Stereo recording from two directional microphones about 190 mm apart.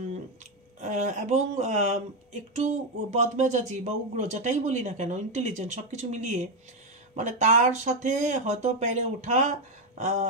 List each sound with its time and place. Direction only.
0.7 s speech: 40° right (ahead or behind)